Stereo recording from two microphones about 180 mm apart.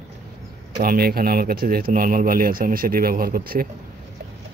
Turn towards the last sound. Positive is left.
turn(degrees=-55)  # may be behind; listen again after turning